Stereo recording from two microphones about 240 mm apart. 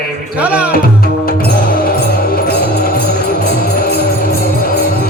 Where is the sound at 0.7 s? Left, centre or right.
Left.